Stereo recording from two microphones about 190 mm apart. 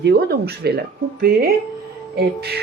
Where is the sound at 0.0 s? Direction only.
60° right (ahead or behind).